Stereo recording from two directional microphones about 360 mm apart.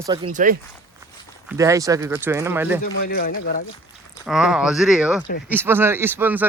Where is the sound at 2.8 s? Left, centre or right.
Left.